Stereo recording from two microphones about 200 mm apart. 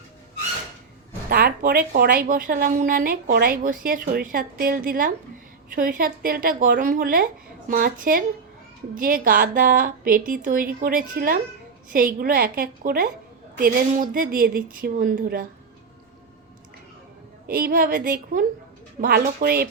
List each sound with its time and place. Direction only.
1.3 s a woman's voice: 50° right (ahead or behind)
17.4 s a woman's voice: 45° right (ahead or behind)